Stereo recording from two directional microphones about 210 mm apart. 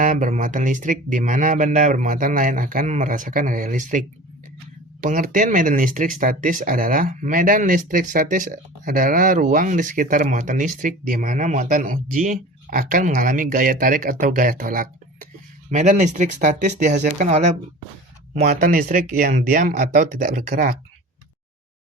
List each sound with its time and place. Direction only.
0.0 s speech: 35° right (ahead or behind)